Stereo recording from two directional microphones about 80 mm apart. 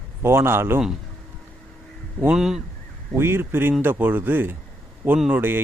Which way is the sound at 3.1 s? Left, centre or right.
Right.